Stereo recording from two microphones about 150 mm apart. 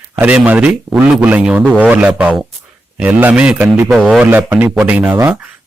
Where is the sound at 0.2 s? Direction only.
10° right (ahead or behind).